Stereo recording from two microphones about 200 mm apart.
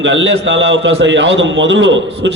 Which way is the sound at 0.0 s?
65° right (ahead or behind).